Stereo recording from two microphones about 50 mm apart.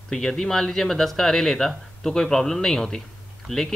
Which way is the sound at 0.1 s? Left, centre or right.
Centre.